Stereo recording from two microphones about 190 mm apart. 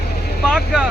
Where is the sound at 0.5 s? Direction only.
5° right (ahead or behind).